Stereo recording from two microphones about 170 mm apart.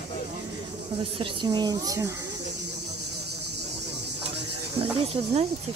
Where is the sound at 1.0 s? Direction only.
30° right (ahead or behind).